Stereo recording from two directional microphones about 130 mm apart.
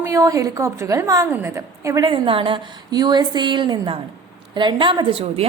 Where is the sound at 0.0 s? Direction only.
25° right (ahead or behind).